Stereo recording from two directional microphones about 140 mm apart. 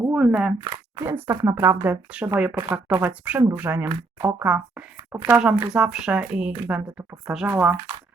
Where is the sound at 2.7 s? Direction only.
15° right (ahead or behind).